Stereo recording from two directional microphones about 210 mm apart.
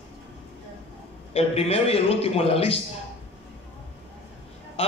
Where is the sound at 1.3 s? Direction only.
30° left (ahead or behind).